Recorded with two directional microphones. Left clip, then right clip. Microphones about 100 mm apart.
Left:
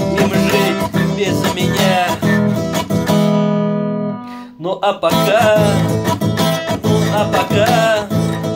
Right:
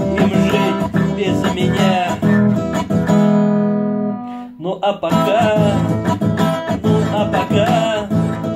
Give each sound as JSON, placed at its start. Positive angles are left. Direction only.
{"t": 0.2, "sound": "music", "side_deg": -15}
{"t": 1.8, "sound": "music", "side_deg": -15}
{"t": 3.1, "sound": "music", "side_deg": 0}
{"t": 5.2, "sound": "music", "side_deg": -15}
{"t": 5.8, "sound": "music", "side_deg": -5}
{"t": 6.9, "sound": "music", "side_deg": -20}